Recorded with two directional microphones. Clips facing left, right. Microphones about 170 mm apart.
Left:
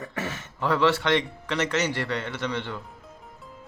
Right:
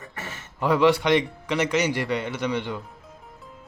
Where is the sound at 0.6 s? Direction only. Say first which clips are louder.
Right 3 dB; 15° right (ahead or behind).